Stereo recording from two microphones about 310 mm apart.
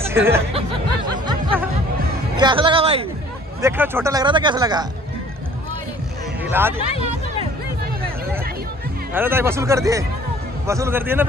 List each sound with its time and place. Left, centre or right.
0.0 s speech: centre
1.2 s music: centre
2.3 s speech: centre
3.6 s speech: centre
9.1 s speech: centre